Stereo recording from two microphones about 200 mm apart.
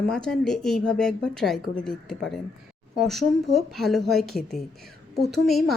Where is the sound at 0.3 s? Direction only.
Centre (ahead or behind).